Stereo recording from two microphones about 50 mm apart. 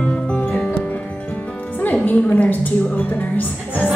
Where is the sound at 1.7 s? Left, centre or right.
Left.